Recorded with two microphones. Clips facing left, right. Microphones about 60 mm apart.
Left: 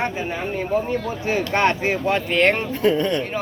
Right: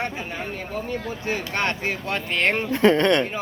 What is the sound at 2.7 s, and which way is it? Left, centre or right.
Speech, right.